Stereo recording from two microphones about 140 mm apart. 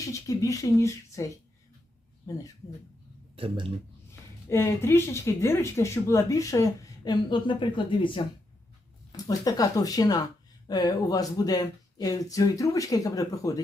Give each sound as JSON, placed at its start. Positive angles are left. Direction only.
{"t": 0.0, "sound": "speech", "side_deg": 25}
{"t": 3.3, "sound": "a man's voice", "side_deg": -40}
{"t": 4.1, "sound": "speech", "side_deg": 20}
{"t": 9.1, "sound": "speech", "side_deg": 25}